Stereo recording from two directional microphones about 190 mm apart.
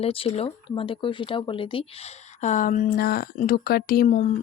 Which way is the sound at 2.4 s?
40° left (ahead or behind).